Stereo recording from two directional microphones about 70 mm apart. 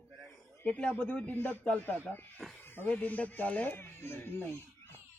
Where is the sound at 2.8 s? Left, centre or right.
Left.